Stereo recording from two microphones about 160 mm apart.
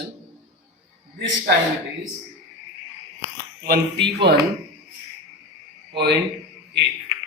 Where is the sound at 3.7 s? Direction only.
90° right.